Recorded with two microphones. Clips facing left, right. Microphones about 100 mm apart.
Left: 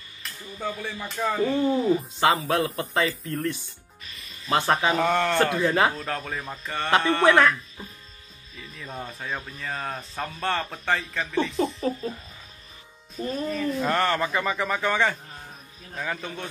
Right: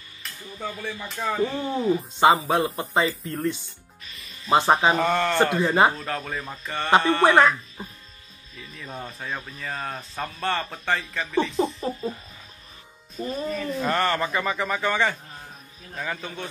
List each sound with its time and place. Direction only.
0.2 s speech: centre (ahead or behind)
2.8 s speech: 20° right (ahead or behind)
3.1 s speech: centre (ahead or behind)
4.5 s speech: 20° right (ahead or behind)
4.9 s speech: centre (ahead or behind)
5.9 s speech: centre (ahead or behind)
7.2 s speech: 15° right (ahead or behind)
8.5 s speech: centre (ahead or behind)
13.3 s speech: 5° right (ahead or behind)